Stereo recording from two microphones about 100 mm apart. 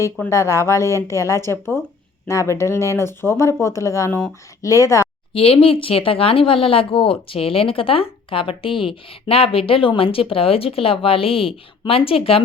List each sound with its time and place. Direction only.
0.3 s speech: 30° left (ahead or behind)
5.3 s speech: 70° left (ahead or behind)